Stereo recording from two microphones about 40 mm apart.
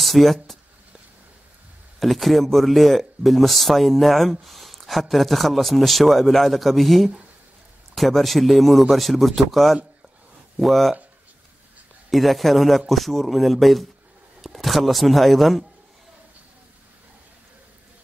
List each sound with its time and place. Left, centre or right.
0.0 s speech: centre
2.0 s speech: centre
12.1 s speech: centre